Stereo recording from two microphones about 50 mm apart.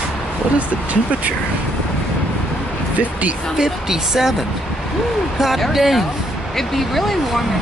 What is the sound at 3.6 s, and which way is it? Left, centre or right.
Speech, centre.